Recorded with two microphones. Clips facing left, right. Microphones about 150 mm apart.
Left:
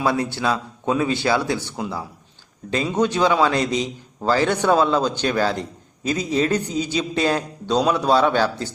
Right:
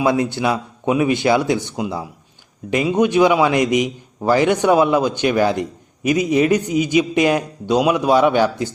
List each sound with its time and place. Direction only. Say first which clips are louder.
0.0 s a man's voice: right 4 dB; 20° right (ahead or behind)